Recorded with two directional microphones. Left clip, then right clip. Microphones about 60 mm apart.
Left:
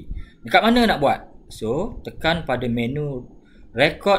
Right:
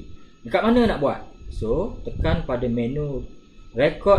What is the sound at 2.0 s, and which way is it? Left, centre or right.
Speech, left.